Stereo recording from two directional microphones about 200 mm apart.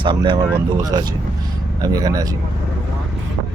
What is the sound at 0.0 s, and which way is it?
Speech, 25° right (ahead or behind).